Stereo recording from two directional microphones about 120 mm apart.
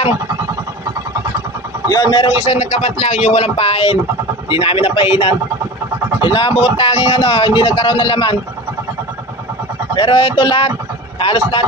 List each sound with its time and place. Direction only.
1.9 s a man's voice: 35° left (ahead or behind)
2.3 s speech: 65° left (ahead or behind); by 8.4 s 45° left (ahead or behind)
9.9 s speech: 45° left (ahead or behind)